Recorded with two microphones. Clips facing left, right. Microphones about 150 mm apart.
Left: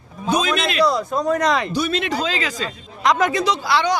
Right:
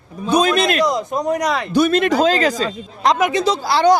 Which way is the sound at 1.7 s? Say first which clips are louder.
Right 7 dB; 50° right (ahead or behind).